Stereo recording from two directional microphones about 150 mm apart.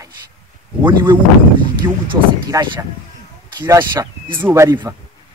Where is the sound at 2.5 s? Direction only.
20° right (ahead or behind).